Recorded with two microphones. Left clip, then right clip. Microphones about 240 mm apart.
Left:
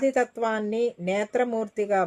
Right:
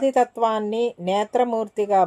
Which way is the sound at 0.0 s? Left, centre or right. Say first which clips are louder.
Right 5 dB; centre.